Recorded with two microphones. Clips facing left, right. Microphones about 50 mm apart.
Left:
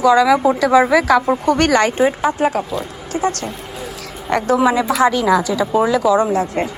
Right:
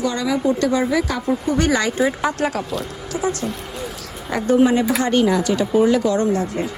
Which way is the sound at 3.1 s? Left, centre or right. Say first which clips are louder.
Left 3 dB; left.